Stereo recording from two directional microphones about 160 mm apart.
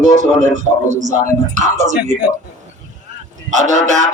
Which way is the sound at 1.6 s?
45° right (ahead or behind).